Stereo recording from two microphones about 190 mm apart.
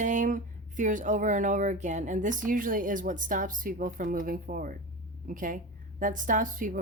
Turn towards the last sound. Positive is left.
turn(degrees=-45)  # may be behind; listen again after turning